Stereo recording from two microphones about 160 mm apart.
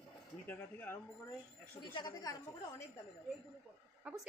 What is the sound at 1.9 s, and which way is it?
Speech, 25° left (ahead or behind).